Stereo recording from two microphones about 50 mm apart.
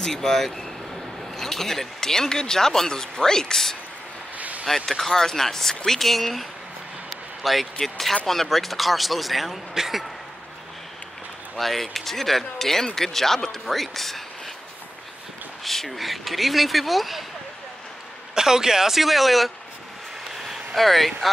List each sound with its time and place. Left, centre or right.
0.0 s speech: centre
4.4 s vehicle: right
4.6 s speech: centre
7.4 s speech: centre
11.5 s speech: centre
15.6 s speech: centre
18.3 s speech: centre